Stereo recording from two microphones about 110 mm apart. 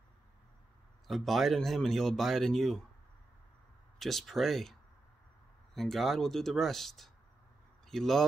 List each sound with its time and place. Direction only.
1.0 s speech: centre (ahead or behind)
4.0 s speech: centre (ahead or behind)
5.8 s speech: centre (ahead or behind)